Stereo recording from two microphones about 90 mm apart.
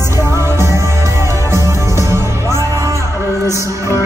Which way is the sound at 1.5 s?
30° right (ahead or behind).